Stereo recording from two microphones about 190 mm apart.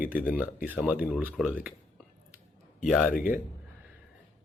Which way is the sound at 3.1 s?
50° left (ahead or behind).